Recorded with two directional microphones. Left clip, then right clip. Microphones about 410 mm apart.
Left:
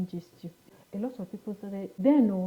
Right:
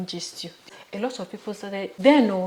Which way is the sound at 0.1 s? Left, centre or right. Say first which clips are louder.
Right 10 dB; centre.